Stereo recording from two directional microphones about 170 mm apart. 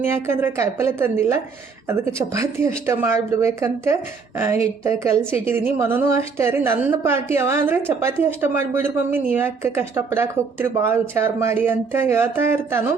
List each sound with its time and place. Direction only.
0.0 s a woman's voice: 15° right (ahead or behind)